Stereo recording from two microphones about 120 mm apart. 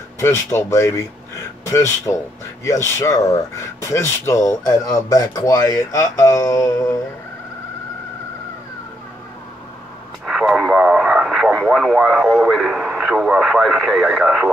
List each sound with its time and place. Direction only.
0.2 s speech: 20° left (ahead or behind)
10.2 s radio: 5° right (ahead or behind)